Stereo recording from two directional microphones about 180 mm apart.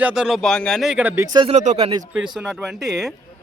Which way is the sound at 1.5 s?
40° right (ahead or behind).